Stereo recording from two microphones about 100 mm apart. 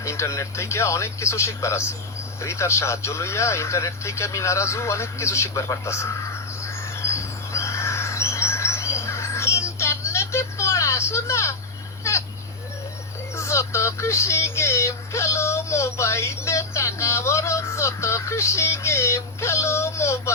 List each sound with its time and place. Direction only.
0.0 s speech: 30° left (ahead or behind)
6.6 s bird: 30° left (ahead or behind)
13.3 s speech: 30° left (ahead or behind)